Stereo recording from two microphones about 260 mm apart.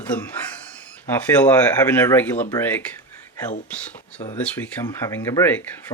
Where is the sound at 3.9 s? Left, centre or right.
Centre.